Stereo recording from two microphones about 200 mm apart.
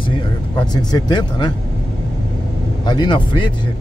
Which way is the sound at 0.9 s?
20° left (ahead or behind).